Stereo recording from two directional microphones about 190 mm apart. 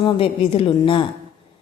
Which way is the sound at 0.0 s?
30° left (ahead or behind).